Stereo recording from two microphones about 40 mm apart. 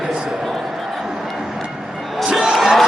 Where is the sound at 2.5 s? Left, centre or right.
Centre.